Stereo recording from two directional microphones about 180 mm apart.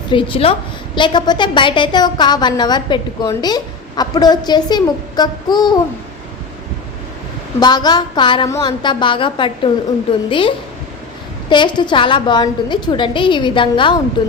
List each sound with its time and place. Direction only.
0.1 s a woman's voice: 30° left (ahead or behind)
7.6 s a woman's voice: 25° left (ahead or behind)